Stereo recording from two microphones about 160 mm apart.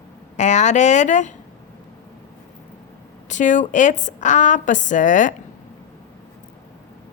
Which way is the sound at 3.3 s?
50° left (ahead or behind).